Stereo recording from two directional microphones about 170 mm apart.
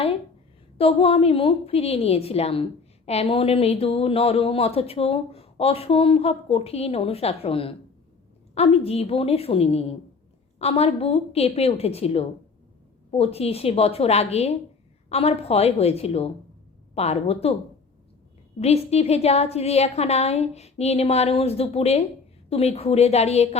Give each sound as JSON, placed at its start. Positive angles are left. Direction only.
{"t": 0.8, "sound": "speech", "side_deg": 35}
{"t": 18.6, "sound": "speech", "side_deg": 40}